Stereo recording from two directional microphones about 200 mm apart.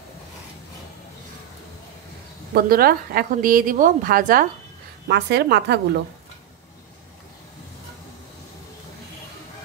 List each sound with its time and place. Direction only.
2.5 s a woman's voice: 50° right (ahead or behind)
5.0 s a woman's voice: 55° right (ahead or behind)